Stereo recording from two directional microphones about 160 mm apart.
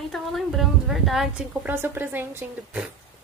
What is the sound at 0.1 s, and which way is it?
A woman's voice, centre (ahead or behind).